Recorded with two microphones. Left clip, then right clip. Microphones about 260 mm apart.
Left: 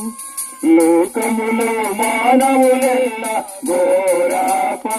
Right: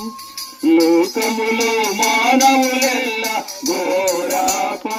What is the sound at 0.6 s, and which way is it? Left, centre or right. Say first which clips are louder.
Music: left 1 dB; left.